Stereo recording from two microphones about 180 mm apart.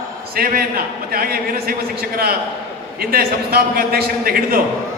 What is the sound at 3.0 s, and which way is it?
A man's voice, 60° right (ahead or behind).